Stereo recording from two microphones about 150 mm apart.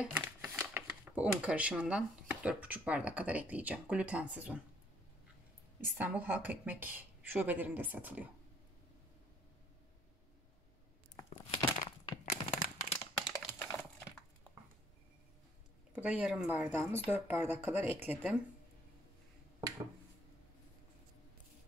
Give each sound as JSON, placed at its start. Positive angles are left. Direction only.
{"t": 0.0, "sound": "speech", "side_deg": -15}
{"t": 5.9, "sound": "speech", "side_deg": -10}
{"t": 12.3, "sound": "crumpling", "side_deg": 55}
{"t": 13.2, "sound": "computer keyboard", "side_deg": 25}
{"t": 15.9, "sound": "speech", "side_deg": -10}